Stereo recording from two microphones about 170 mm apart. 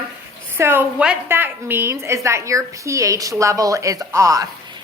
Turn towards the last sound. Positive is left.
turn(degrees=-20)  # may be behind; listen again after turning